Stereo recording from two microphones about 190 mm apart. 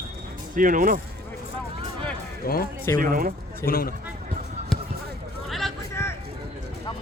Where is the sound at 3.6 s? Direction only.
50° left (ahead or behind).